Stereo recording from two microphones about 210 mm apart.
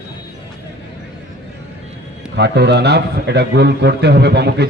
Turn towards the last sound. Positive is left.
turn(degrees=-50)  # may be behind; listen again after turning